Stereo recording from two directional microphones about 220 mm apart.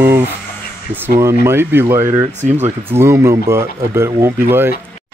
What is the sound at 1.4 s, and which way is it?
Speech, 10° right (ahead or behind).